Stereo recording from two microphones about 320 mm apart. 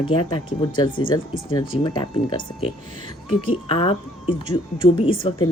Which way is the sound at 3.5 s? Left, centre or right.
Centre.